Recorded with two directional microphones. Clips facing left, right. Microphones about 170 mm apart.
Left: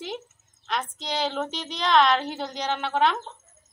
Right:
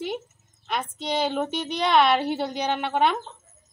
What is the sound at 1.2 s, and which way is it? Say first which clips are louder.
A woman's voice: right 2 dB; 10° right (ahead or behind).